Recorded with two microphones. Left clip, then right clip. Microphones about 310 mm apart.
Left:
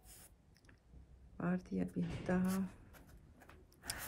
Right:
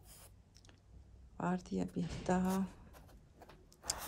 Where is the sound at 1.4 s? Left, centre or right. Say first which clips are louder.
Right 3 dB; centre.